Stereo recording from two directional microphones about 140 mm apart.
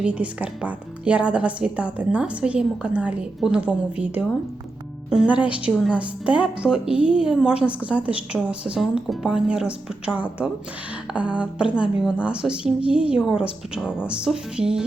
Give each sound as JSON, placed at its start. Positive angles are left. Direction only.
{"t": 0.0, "sound": "a woman's voice", "side_deg": -10}